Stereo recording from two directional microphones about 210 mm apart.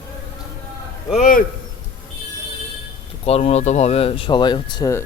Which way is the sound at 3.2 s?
30° left (ahead or behind).